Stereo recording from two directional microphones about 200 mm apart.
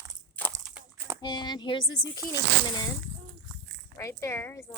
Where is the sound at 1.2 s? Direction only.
20° left (ahead or behind).